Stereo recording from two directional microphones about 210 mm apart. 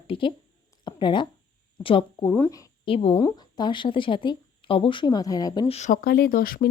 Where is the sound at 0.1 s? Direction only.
25° left (ahead or behind).